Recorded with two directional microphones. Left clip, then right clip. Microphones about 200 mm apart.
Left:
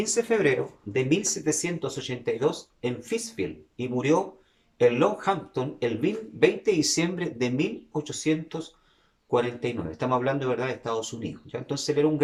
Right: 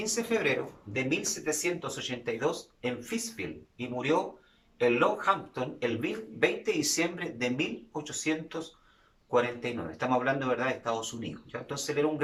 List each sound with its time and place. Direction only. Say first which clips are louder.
0.0 s speech: left 6 dB; 40° left (ahead or behind)